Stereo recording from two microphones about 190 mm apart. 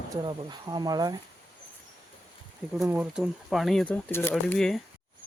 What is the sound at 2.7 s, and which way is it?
Speech, 5° right (ahead or behind).